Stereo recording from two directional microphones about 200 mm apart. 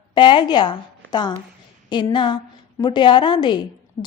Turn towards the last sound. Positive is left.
turn(degrees=20)  # may be behind; listen again after turning